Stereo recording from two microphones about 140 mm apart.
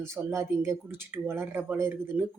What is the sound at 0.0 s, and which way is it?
Speech, 20° right (ahead or behind).